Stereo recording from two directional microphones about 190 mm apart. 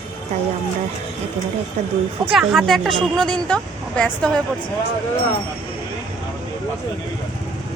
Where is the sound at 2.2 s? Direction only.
Centre (ahead or behind).